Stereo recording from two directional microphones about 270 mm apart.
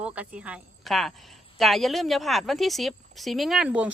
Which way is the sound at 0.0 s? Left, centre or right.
Centre.